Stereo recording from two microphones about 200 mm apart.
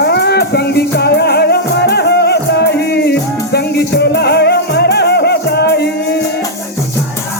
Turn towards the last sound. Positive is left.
turn(degrees=55)  # may be behind; listen again after turning